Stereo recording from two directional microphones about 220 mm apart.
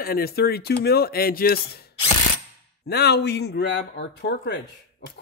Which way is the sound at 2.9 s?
45° left (ahead or behind).